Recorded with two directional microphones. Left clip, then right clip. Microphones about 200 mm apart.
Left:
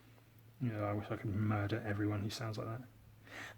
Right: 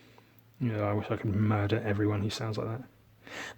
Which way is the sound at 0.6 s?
40° right (ahead or behind).